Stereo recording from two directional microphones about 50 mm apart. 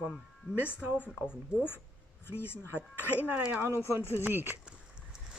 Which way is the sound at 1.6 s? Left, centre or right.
Left.